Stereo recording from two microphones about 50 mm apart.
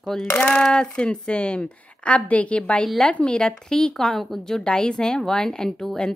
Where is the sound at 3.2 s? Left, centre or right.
Centre.